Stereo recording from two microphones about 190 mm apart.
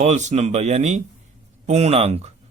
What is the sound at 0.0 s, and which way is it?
Speech, 35° right (ahead or behind).